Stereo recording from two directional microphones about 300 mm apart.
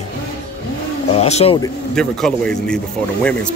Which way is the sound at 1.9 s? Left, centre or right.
Centre.